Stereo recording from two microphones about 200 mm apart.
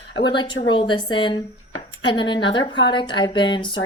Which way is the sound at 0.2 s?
25° left (ahead or behind).